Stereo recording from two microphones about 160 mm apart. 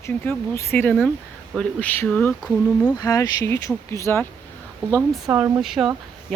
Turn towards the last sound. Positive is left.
turn(degrees=0)  # may be behind; listen again after turning